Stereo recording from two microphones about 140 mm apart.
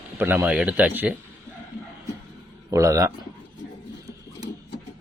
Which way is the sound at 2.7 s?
25° right (ahead or behind).